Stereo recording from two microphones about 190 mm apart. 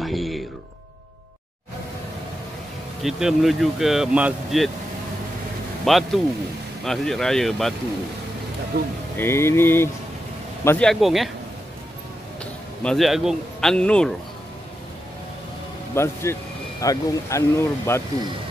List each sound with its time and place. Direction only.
0.0 s music: centre (ahead or behind)
3.0 s speech: centre (ahead or behind)
5.9 s speech: centre (ahead or behind)
9.1 s speech: 10° left (ahead or behind)
12.8 s speech: centre (ahead or behind)
15.9 s speech: 15° left (ahead or behind)